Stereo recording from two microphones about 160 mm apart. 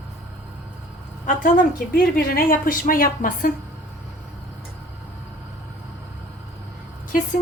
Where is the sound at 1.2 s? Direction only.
55° left (ahead or behind).